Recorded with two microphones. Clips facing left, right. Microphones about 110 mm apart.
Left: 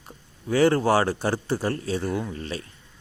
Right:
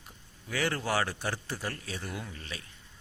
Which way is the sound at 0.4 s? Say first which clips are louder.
Left 12 dB; 35° left (ahead or behind).